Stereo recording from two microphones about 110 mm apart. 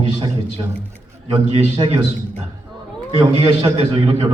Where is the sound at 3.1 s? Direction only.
55° right (ahead or behind).